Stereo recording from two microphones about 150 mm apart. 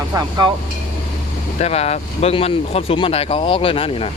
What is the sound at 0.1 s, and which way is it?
Speech, 25° right (ahead or behind).